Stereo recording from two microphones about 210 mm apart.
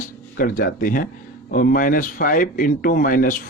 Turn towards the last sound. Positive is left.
turn(degrees=40)  # may be behind; listen again after turning